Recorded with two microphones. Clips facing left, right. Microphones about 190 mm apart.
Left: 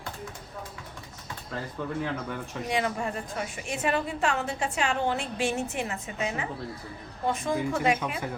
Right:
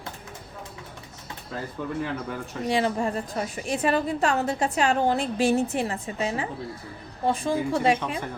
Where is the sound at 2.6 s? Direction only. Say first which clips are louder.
Right 5 dB; 30° right (ahead or behind).